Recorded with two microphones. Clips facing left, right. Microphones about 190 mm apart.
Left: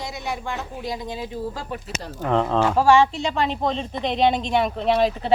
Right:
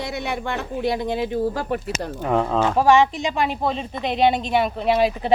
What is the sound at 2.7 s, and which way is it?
Speech, 15° right (ahead or behind).